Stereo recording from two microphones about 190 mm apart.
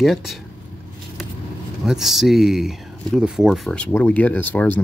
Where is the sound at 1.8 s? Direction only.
Centre (ahead or behind).